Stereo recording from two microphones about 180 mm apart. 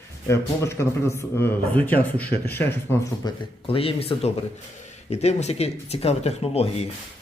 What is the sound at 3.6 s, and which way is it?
Speech, 30° left (ahead or behind).